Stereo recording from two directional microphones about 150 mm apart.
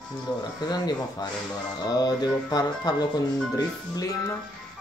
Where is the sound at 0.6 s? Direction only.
25° left (ahead or behind).